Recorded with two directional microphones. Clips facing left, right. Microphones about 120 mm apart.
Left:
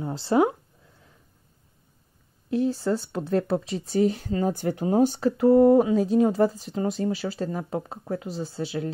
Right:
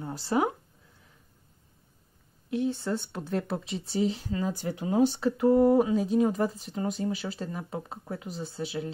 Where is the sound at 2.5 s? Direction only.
35° left (ahead or behind).